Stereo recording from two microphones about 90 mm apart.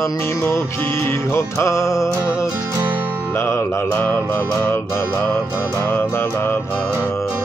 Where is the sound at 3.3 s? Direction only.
25° left (ahead or behind).